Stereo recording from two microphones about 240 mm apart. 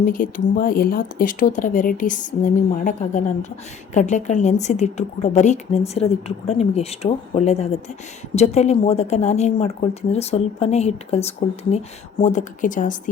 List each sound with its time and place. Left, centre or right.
0.0 s speech: left